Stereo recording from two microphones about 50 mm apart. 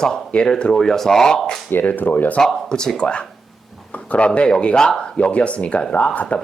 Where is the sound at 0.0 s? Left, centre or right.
Centre.